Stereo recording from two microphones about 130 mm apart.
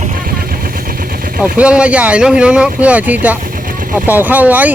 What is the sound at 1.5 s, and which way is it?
Speech, 10° right (ahead or behind).